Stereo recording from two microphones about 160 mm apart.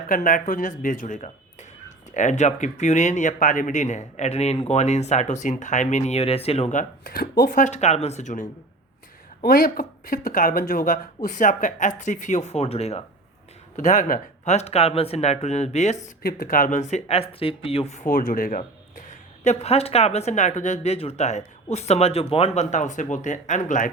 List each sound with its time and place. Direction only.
0.1 s speech: 60° left (ahead or behind)
7.1 s speech: 75° left (ahead or behind); by 8.4 s 50° left (ahead or behind)
9.4 s speech: 65° left (ahead or behind); by 13.0 s 40° left (ahead or behind)
13.7 s speech: 50° left (ahead or behind)
16.2 s speech: 65° left (ahead or behind); by 18.0 s 40° left (ahead or behind)
18.0 s speech: 60° left (ahead or behind)